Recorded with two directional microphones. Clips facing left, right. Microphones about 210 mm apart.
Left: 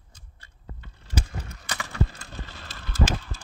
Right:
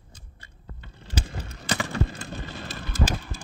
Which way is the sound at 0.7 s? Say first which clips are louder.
Left 1 dB; 30° right (ahead or behind).